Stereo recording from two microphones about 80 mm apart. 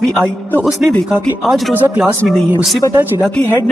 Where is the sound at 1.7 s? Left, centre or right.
Right.